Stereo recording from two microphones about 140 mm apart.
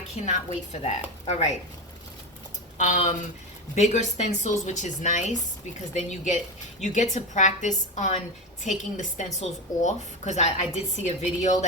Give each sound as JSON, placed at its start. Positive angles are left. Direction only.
{"t": 0.3, "sound": "a woman's voice", "side_deg": 55}
{"t": 2.7, "sound": "a woman's voice", "side_deg": 60}